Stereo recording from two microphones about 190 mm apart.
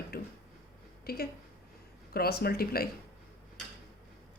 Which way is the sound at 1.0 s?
55° left (ahead or behind).